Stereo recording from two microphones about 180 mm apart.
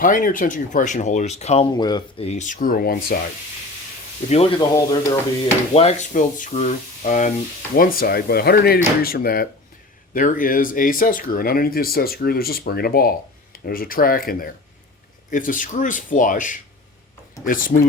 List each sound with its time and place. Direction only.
0.0 s speech: 50° left (ahead or behind)
1.7 s speech: 25° left (ahead or behind)
2.2 s speech: 40° left (ahead or behind); by 3.2 s 55° left (ahead or behind)
4.3 s speech: 35° left (ahead or behind)
4.6 s speech: 20° left (ahead or behind)
5.7 s speech: 35° left (ahead or behind)